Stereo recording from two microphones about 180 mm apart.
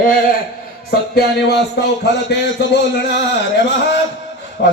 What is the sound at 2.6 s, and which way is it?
Speech, 65° left (ahead or behind).